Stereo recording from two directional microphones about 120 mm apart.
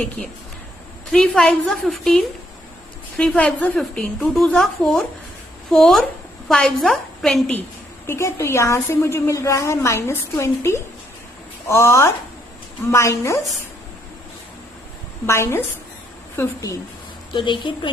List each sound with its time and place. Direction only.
1.1 s a woman's voice: 5° left (ahead or behind)
8.0 s a woman's voice: 20° left (ahead or behind)
15.3 s a woman's voice: 20° left (ahead or behind)
17.3 s a woman's voice: 40° left (ahead or behind)